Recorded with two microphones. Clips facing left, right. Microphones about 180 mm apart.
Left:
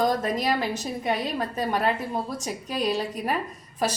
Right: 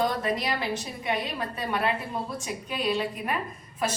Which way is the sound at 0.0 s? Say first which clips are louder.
Left 3 dB; 45° left (ahead or behind).